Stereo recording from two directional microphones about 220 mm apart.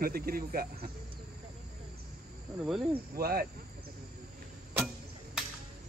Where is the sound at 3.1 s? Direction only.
45° right (ahead or behind).